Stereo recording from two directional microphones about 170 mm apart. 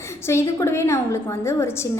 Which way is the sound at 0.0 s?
15° left (ahead or behind).